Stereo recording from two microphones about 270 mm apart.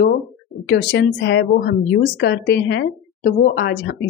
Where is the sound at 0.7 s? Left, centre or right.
Left.